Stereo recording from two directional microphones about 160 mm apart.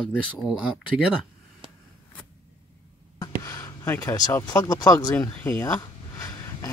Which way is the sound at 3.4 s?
20° left (ahead or behind).